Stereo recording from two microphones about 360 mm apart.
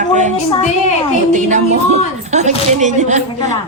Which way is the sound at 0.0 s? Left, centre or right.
Centre.